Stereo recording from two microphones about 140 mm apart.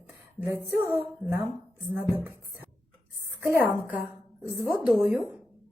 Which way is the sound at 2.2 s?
15° right (ahead or behind).